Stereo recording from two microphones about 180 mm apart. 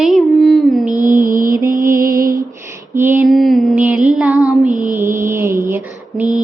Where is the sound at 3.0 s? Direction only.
10° right (ahead or behind).